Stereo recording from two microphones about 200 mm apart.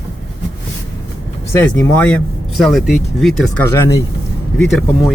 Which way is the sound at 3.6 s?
15° left (ahead or behind).